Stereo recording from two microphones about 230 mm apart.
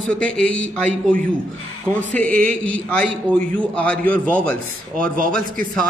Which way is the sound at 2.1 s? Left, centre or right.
Right.